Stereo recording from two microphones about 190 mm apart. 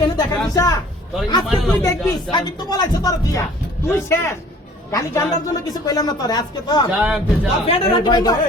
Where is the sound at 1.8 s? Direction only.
15° left (ahead or behind).